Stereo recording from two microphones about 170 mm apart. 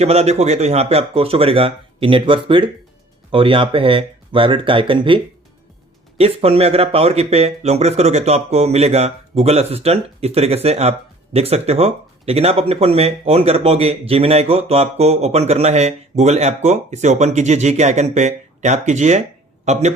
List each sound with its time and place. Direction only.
0.0 s a man's voice: 40° right (ahead or behind)